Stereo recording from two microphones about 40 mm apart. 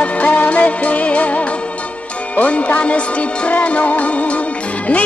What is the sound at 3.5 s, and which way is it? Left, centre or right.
Music, left.